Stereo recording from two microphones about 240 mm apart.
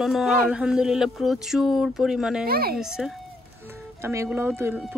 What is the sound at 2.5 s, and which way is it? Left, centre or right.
Speech, right.